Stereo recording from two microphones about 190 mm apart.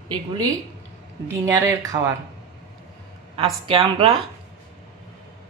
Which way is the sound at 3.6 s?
30° right (ahead or behind).